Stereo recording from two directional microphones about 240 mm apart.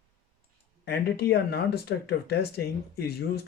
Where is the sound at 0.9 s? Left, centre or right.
Left.